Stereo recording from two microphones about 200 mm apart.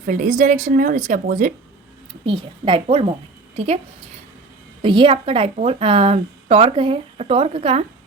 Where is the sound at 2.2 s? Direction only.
25° right (ahead or behind).